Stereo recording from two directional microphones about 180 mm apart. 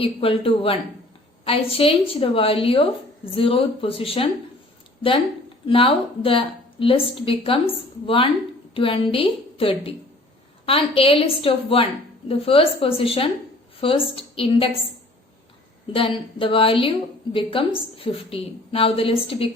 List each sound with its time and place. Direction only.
0.0 s a woman's voice: 30° left (ahead or behind)
5.6 s a woman's voice: 30° left (ahead or behind)
15.9 s a woman's voice: 30° left (ahead or behind)